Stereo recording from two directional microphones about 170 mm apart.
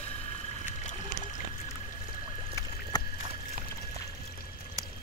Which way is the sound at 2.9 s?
25° left (ahead or behind).